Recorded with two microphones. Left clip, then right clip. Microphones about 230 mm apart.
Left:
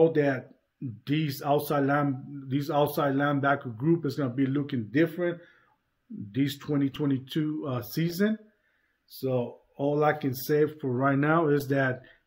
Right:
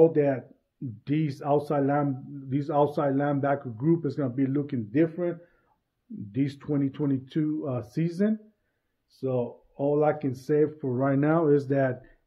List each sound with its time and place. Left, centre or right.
0.0 s a man's voice: centre